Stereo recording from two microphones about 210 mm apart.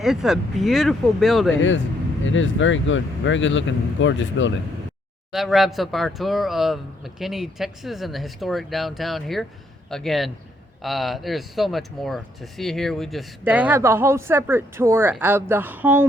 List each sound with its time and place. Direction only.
0.0 s speech: centre (ahead or behind)
2.2 s speech: 65° left (ahead or behind)
5.3 s speech: centre (ahead or behind)